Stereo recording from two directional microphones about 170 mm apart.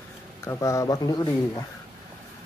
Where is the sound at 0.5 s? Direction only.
20° left (ahead or behind).